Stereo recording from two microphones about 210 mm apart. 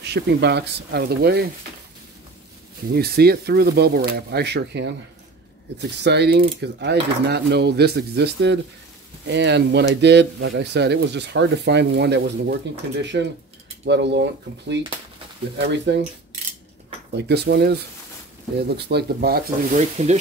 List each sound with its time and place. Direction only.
0.0 s speech: 50° right (ahead or behind)
2.9 s speech: 50° right (ahead or behind)
17.1 s speech: 55° right (ahead or behind)
18.8 s speech: 50° right (ahead or behind)
19.8 s speech: 30° right (ahead or behind)